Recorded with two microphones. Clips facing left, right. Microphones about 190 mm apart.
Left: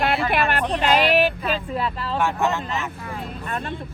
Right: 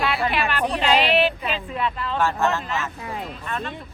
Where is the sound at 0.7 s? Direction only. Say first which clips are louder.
Left 1 dB; 40° left (ahead or behind).